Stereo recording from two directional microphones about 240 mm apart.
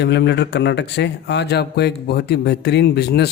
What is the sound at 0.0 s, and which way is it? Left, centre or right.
A man's voice, left.